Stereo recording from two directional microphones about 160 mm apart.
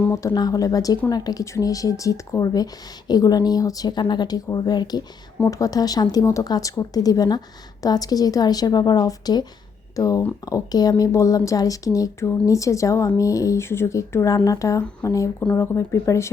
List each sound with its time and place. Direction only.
0.1 s speech: 20° left (ahead or behind)